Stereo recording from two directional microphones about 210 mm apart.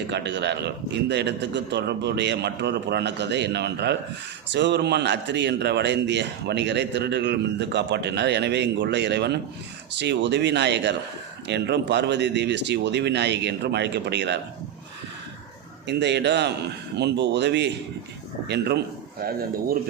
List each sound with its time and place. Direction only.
0.1 s speech: 55° right (ahead or behind)
15.9 s a man's voice: 55° right (ahead or behind)